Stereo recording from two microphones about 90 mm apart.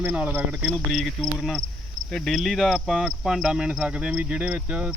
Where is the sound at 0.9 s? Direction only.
Centre (ahead or behind).